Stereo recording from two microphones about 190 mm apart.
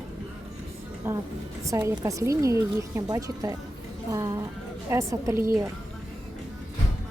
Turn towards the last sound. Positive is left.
turn(degrees=-15)  # may be behind; listen again after turning